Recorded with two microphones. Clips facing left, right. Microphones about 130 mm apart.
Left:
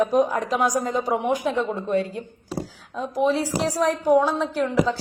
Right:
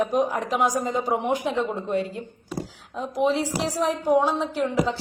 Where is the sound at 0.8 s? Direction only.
20° right (ahead or behind).